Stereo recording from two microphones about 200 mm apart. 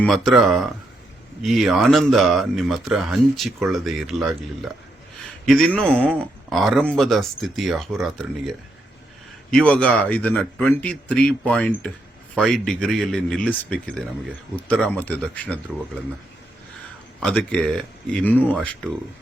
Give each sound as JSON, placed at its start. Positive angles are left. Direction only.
{"t": 0.0, "sound": "speech", "side_deg": 0}
{"t": 17.2, "sound": "speech", "side_deg": 5}